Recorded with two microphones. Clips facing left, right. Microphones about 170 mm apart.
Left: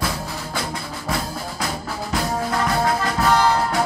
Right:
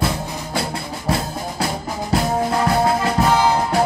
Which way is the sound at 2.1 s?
25° right (ahead or behind).